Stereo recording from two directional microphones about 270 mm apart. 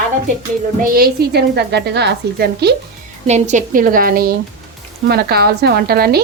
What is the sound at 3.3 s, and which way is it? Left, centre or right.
A woman's voice, right.